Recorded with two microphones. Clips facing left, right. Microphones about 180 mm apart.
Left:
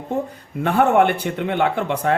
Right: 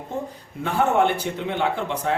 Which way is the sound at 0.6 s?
60° left (ahead or behind).